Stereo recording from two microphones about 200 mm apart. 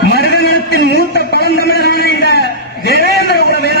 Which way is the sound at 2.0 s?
50° right (ahead or behind).